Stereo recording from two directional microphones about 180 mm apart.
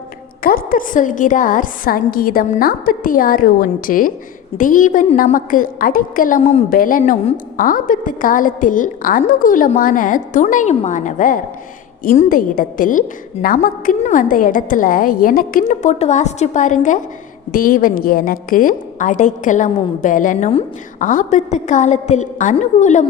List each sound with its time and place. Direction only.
0.4 s a woman's voice: 50° left (ahead or behind); by 6.7 s 35° left (ahead or behind)
6.7 s a woman's voice: 50° left (ahead or behind)